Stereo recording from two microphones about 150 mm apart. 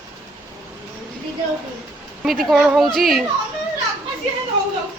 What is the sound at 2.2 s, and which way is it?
Speech, centre (ahead or behind).